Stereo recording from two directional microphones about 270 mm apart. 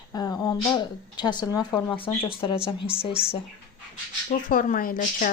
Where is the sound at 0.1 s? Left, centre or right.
Centre.